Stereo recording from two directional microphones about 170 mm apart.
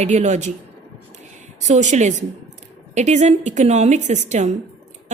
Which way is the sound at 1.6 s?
45° right (ahead or behind).